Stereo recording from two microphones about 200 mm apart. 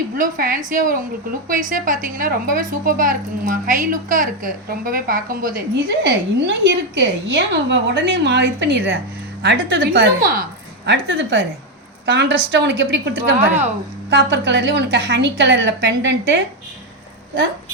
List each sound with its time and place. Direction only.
0.2 s a woman's voice: 45° right (ahead or behind)
5.7 s a woman's voice: 55° right (ahead or behind)